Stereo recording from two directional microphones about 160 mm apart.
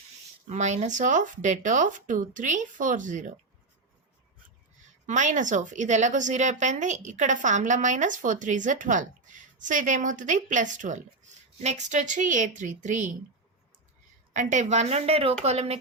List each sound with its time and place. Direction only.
0.4 s a woman's voice: 45° right (ahead or behind)
5.0 s a woman's voice: 50° right (ahead or behind)
14.3 s a woman's voice: 50° right (ahead or behind)